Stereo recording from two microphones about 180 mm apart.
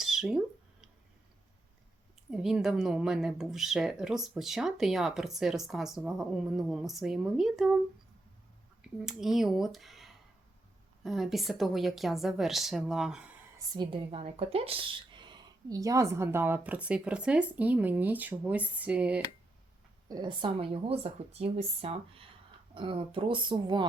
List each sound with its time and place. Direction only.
0.0 s a sound: centre (ahead or behind)
2.3 s speech: centre (ahead or behind)
8.8 s speech: 5° right (ahead or behind)
13.7 s speech: 30° right (ahead or behind); by 19.2 s 5° right (ahead or behind)
20.1 s speech: 25° right (ahead or behind)